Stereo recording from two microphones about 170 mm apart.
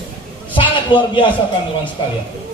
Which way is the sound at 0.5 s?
30° left (ahead or behind).